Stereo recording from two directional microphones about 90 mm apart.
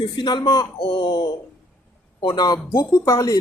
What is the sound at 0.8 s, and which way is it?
A man's voice, 65° left (ahead or behind).